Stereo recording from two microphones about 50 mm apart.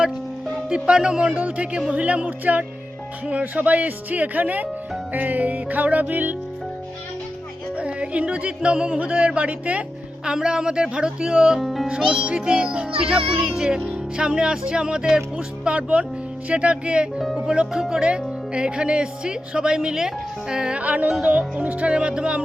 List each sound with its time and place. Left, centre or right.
0.7 s a woman's voice: centre; by 6.3 s right
7.8 s a woman's voice: right
10.2 s a woman's voice: centre
11.6 s speech: centre
11.9 s a woman's voice: centre
13.5 s a woman's voice: centre
17.2 s a woman's voice: centre
20.7 s speech: right